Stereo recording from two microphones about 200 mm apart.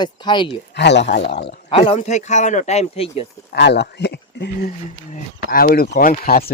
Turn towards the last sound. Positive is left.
turn(degrees=50)  # may be behind; listen again after turning